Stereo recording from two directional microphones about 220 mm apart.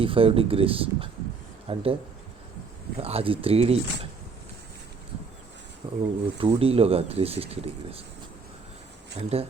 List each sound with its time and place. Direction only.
0.0 s speech: 25° right (ahead or behind)
3.0 s speech: 25° right (ahead or behind)
6.0 s speech: 20° right (ahead or behind)
9.1 s speech: 25° right (ahead or behind)